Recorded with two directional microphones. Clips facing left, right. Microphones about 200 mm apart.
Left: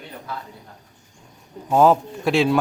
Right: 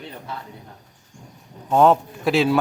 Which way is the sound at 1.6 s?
5° left (ahead or behind).